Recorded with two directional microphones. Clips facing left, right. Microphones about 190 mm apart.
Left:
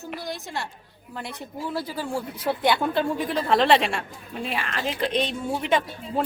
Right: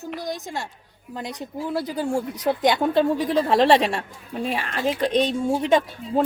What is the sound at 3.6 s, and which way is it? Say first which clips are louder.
Speech: right 2 dB; 40° right (ahead or behind).